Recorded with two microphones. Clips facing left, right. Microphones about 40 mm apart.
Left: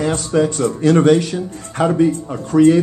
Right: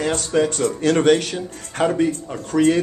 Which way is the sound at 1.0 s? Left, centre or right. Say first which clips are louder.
Left 3 dB; right.